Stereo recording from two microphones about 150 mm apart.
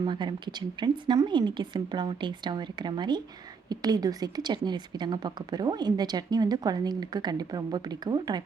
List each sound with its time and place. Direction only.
0.0 s a woman's voice: 30° right (ahead or behind)